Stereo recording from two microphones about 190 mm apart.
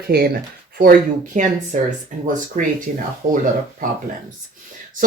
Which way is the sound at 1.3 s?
40° right (ahead or behind).